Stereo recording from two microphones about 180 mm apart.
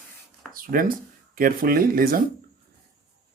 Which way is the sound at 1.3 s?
50° right (ahead or behind).